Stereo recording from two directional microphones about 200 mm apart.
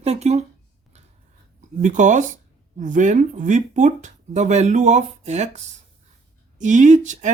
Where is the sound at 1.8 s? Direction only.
40° right (ahead or behind).